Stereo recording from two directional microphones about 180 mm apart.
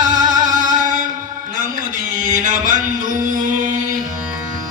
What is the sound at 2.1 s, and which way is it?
Music, 45° right (ahead or behind).